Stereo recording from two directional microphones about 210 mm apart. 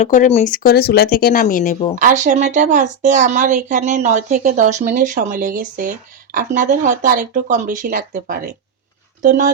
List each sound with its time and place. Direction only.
0.0 s speech: 35° left (ahead or behind)
2.0 s a woman's voice: 35° right (ahead or behind)